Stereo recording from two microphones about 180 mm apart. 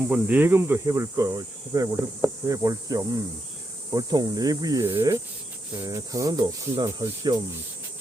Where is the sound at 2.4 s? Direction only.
20° right (ahead or behind).